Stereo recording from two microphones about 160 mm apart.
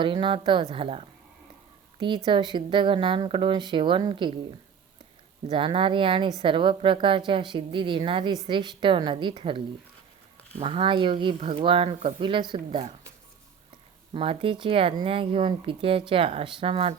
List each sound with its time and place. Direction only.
0.0 s speech: 30° right (ahead or behind)
5.5 s speech: 35° right (ahead or behind)
10.6 s speech: 35° right (ahead or behind)
14.1 s speech: 35° right (ahead or behind)